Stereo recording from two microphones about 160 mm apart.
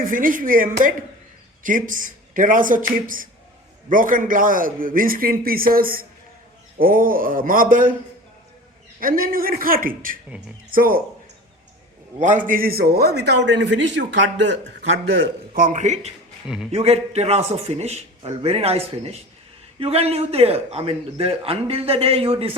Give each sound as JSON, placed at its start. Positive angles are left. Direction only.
{"t": 0.0, "sound": "a man's voice", "side_deg": -60}
{"t": 9.0, "sound": "a man's voice", "side_deg": -65}
{"t": 12.2, "sound": "a man's voice", "side_deg": -55}